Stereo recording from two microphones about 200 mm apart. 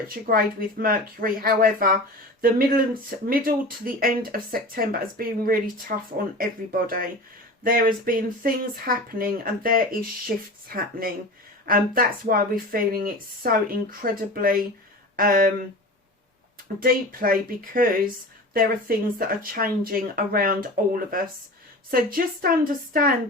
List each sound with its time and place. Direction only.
0.1 s speech: 45° right (ahead or behind)
16.8 s speech: 45° right (ahead or behind)
18.5 s speech: 45° right (ahead or behind)